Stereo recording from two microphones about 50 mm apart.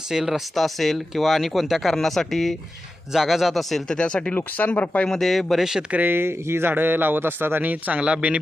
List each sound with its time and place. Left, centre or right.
0.1 s speech: centre
3.9 s speech: centre
4.4 s speech: left
5.0 s speech: centre
6.1 s speech: right
8.0 s speech: right